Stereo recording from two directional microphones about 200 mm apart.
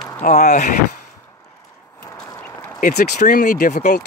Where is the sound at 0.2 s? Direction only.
35° left (ahead or behind).